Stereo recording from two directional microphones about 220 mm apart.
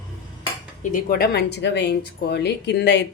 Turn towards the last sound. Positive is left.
turn(degrees=50)  # may be behind; listen again after turning